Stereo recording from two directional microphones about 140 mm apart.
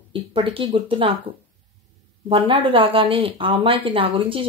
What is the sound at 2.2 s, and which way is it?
Speech, 35° right (ahead or behind).